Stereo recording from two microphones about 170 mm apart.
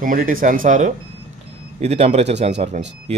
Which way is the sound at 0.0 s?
55° right (ahead or behind).